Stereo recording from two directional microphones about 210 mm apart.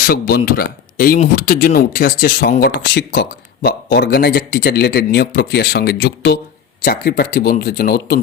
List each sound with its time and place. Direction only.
0.0 s speech: 45° left (ahead or behind)